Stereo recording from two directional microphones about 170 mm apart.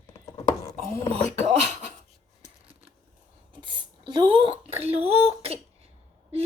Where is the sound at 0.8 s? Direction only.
40° right (ahead or behind).